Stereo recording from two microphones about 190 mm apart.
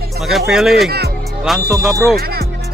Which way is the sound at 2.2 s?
55° right (ahead or behind).